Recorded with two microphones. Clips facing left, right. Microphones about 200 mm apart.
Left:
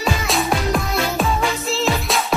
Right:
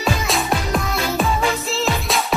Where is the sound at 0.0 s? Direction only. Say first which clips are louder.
Even; centre (ahead or behind).